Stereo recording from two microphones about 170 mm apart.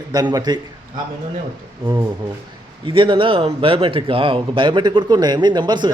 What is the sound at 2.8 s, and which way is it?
Speech, 30° right (ahead or behind).